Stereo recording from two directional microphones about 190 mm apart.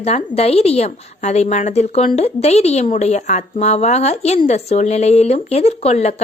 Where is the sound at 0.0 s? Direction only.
35° left (ahead or behind).